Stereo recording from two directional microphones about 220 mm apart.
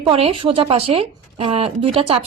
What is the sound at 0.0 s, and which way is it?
A woman's voice, 25° right (ahead or behind).